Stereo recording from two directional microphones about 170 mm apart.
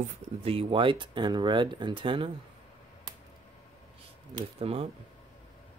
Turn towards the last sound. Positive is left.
turn(degrees=-35)  # may be behind; listen again after turning